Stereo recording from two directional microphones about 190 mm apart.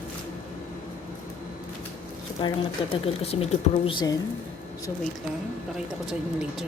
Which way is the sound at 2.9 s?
30° left (ahead or behind).